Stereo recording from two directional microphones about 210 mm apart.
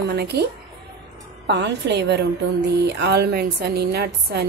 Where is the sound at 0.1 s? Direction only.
50° right (ahead or behind).